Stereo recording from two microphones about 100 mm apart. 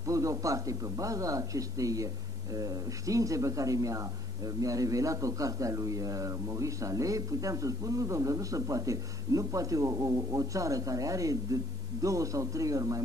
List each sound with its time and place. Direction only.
0.0 s speech: 35° right (ahead or behind)